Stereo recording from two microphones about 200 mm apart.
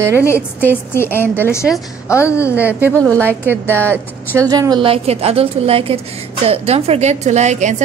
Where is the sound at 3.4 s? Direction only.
10° right (ahead or behind); by 7.7 s 35° right (ahead or behind).